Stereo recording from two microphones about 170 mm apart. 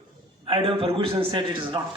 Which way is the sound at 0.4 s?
30° right (ahead or behind).